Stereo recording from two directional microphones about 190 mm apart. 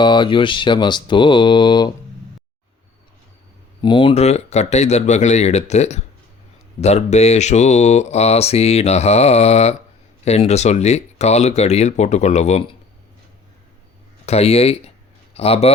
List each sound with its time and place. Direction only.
0.0 s speech: 25° left (ahead or behind)
3.8 s speech: 25° left (ahead or behind)
14.3 s speech: 30° left (ahead or behind)